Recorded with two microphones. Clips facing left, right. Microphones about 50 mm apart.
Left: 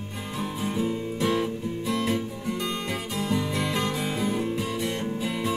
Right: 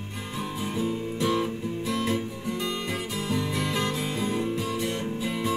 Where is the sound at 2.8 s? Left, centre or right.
Centre.